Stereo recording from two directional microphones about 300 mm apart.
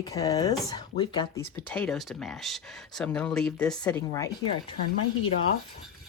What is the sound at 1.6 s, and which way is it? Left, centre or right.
Speech, centre.